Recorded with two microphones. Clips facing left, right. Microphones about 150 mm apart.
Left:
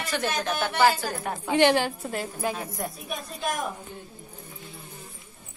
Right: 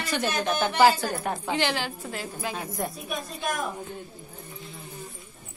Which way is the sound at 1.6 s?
50° left (ahead or behind).